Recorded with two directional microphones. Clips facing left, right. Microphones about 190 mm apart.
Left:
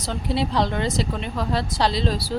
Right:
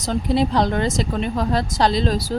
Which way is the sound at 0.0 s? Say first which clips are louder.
Right 5 dB; 45° right (ahead or behind).